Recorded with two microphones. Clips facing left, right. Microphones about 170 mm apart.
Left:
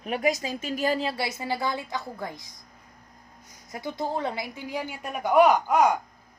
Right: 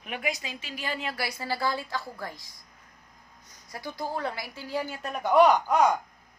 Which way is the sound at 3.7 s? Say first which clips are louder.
Left 4 dB; 20° left (ahead or behind).